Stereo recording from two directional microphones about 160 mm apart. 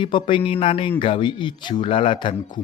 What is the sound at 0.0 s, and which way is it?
Speech, 30° left (ahead or behind).